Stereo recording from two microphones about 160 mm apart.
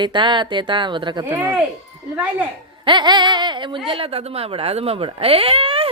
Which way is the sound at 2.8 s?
30° right (ahead or behind).